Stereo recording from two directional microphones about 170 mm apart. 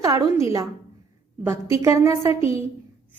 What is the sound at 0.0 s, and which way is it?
A woman's voice, 20° right (ahead or behind).